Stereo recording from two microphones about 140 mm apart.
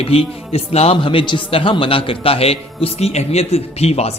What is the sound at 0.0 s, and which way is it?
A man's voice, 45° left (ahead or behind).